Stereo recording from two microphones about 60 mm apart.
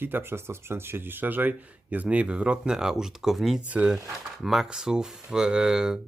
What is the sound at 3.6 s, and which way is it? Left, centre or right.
Speech, right.